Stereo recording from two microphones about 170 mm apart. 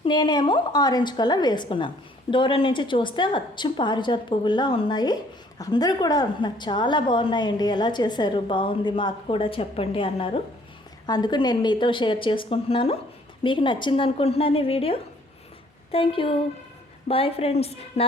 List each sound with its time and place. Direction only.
0.0 s a woman's voice: 25° left (ahead or behind)